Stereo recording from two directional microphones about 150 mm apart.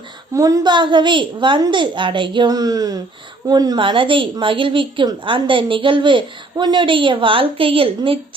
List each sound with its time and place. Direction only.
0.3 s a woman's voice: 25° right (ahead or behind)